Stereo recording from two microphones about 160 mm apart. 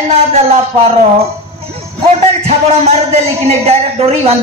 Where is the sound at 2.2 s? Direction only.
45° right (ahead or behind).